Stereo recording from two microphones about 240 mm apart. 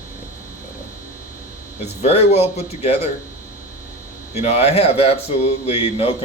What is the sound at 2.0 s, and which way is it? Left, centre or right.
A man's voice, left.